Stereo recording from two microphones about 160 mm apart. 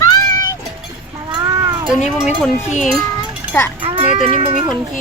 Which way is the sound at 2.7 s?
50° left (ahead or behind).